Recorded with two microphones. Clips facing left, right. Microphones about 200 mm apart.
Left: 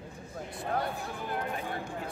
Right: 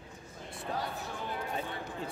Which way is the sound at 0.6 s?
55° left (ahead or behind).